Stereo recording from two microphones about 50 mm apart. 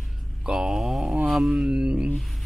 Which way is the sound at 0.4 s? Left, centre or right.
Centre.